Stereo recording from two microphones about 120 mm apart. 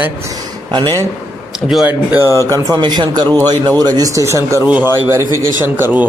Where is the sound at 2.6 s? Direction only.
40° right (ahead or behind).